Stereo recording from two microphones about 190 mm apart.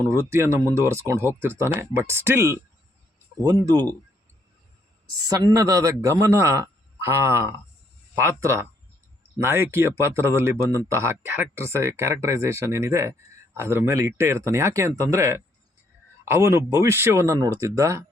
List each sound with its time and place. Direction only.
0.3 s speech: 15° right (ahead or behind)
5.0 s speech: 20° right (ahead or behind)